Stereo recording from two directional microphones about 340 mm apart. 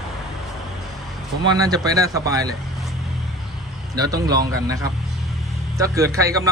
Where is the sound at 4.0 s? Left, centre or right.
Centre.